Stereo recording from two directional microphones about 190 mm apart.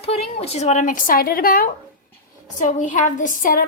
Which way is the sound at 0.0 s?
30° left (ahead or behind).